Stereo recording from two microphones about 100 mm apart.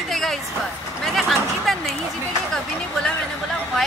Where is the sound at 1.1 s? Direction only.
Centre (ahead or behind).